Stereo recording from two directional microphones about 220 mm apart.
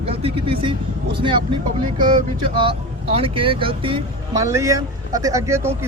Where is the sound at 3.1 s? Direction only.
25° right (ahead or behind).